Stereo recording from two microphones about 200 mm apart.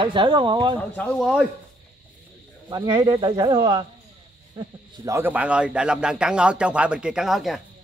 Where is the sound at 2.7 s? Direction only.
20° right (ahead or behind); by 7.6 s centre (ahead or behind).